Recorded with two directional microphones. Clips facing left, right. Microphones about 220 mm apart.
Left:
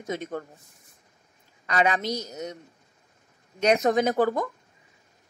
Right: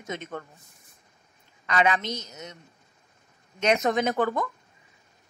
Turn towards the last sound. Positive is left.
turn(degrees=35)  # may be behind; listen again after turning